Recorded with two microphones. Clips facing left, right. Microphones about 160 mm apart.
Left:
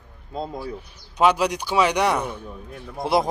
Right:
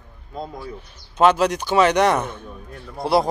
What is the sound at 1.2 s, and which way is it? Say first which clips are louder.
A man's voice: right 3 dB; 10° left (ahead or behind).